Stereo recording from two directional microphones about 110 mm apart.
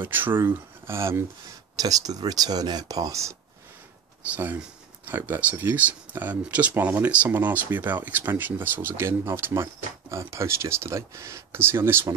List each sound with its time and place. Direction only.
0.0 s speech: 20° right (ahead or behind)
1.8 s speech: 35° right (ahead or behind)
4.4 s speech: 15° right (ahead or behind)